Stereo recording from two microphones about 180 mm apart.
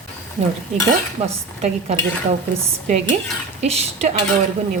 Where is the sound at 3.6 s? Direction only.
35° right (ahead or behind).